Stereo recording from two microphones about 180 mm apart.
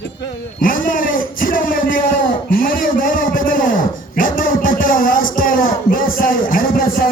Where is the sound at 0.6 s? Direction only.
50° left (ahead or behind).